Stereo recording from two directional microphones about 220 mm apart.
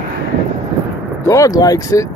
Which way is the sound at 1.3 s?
15° left (ahead or behind).